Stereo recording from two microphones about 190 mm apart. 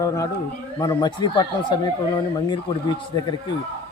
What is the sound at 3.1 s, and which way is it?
Speech, 25° left (ahead or behind).